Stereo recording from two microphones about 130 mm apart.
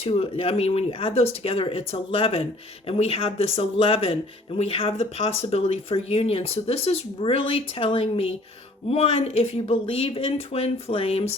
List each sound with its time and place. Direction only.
0.0 s speech: 50° left (ahead or behind)